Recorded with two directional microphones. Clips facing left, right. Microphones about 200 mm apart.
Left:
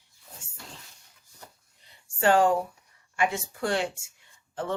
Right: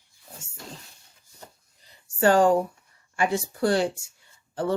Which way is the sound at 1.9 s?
40° right (ahead or behind).